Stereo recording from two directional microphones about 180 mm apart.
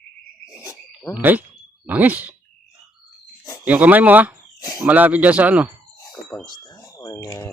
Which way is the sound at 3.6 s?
10° right (ahead or behind).